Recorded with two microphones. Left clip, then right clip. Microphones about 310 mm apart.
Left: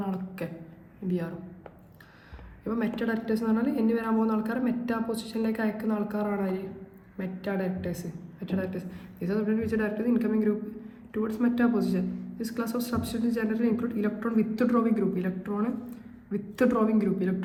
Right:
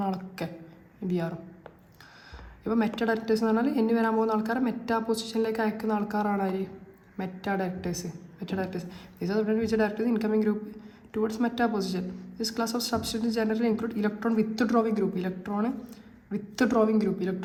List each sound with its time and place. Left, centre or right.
0.0 s a sound: centre
1.0 s speech: centre
2.6 s a woman's voice: centre